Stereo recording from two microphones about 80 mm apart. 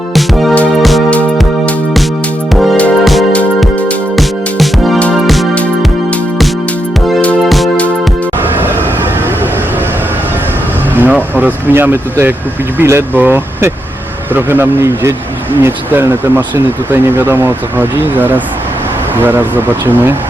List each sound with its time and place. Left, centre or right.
0.1 s music: centre
3.0 s music: centre
10.9 s speech: right